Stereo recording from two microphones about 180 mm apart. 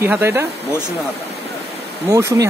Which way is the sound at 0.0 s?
10° right (ahead or behind).